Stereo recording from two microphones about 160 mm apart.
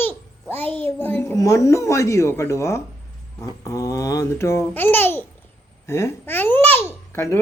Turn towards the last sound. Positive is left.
turn(degrees=15)  # may be behind; listen again after turning